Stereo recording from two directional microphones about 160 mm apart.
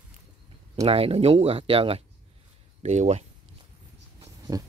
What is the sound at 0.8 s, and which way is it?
Speech, 35° right (ahead or behind).